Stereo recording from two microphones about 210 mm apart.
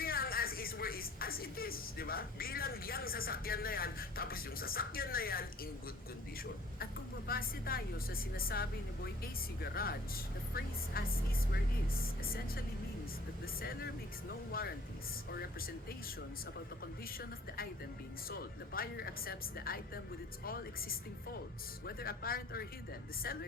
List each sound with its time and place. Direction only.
0.0 s music: 45° left (ahead or behind)
7.3 s a woman's voice: 45° left (ahead or behind)
18.3 s a woman's voice: 45° left (ahead or behind)